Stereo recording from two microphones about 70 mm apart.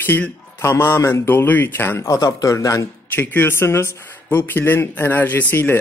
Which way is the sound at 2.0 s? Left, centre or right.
Left.